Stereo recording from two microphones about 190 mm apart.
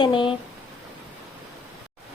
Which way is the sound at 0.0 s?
25° left (ahead or behind).